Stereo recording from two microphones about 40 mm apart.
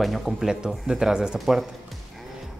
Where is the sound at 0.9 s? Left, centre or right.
Centre.